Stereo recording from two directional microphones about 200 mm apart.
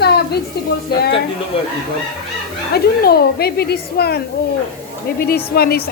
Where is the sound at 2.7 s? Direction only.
50° left (ahead or behind).